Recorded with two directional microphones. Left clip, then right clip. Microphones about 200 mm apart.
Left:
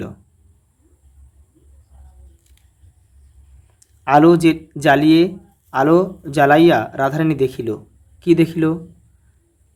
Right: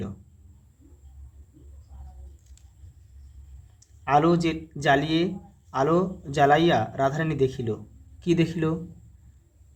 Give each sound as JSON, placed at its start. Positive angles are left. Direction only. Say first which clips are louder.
{"t": 3.8, "sound": "speech", "louder": "left 9 dB", "side_deg": 40}